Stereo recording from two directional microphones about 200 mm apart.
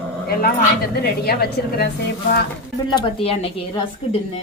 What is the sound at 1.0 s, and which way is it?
Speech, 50° left (ahead or behind).